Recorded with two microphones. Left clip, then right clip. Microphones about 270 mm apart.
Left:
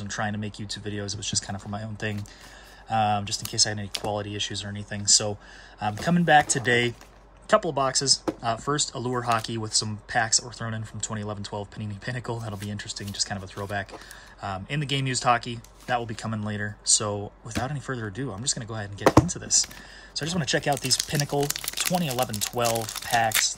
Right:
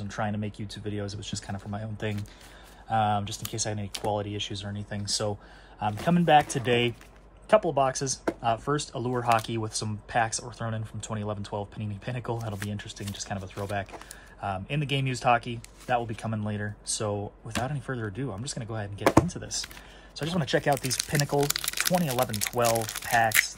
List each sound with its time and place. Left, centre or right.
0.0 s speech: centre